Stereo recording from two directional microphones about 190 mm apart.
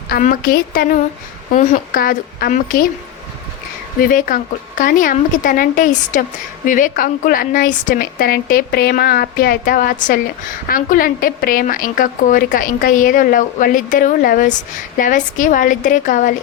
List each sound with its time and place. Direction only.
0.1 s a woman's voice: 50° left (ahead or behind)
4.3 s a woman's voice: 45° left (ahead or behind)